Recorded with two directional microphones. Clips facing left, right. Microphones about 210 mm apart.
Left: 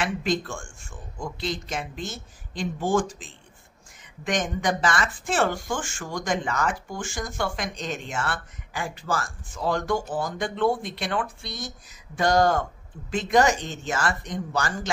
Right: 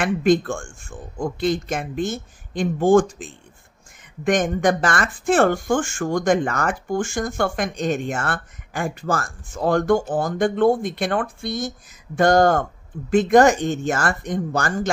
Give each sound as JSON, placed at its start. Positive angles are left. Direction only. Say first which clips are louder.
{"t": 0.0, "sound": "speech", "louder": "right 8 dB", "side_deg": -50}